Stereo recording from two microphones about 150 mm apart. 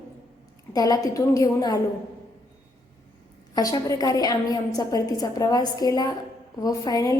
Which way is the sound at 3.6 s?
25° left (ahead or behind).